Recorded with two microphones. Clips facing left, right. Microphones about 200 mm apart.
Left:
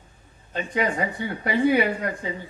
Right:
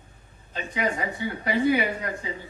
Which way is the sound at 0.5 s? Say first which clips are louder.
Left 3 dB; 55° left (ahead or behind).